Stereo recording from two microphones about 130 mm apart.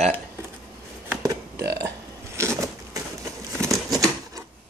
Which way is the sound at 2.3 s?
20° right (ahead or behind).